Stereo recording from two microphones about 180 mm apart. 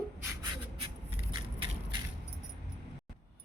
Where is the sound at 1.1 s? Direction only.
30° right (ahead or behind).